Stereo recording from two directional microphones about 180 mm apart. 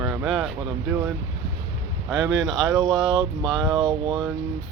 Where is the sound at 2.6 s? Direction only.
20° right (ahead or behind).